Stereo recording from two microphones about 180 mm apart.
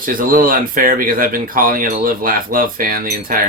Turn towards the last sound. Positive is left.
turn(degrees=-50)  # may be behind; listen again after turning